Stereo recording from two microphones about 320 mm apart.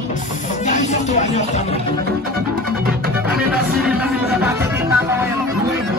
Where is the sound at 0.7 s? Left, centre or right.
Left.